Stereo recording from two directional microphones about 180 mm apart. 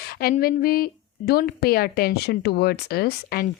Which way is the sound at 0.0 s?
55° left (ahead or behind).